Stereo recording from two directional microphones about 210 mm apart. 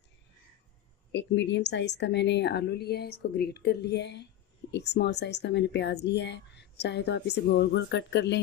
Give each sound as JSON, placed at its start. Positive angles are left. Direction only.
{"t": 1.1, "sound": "a woman's voice", "side_deg": 55}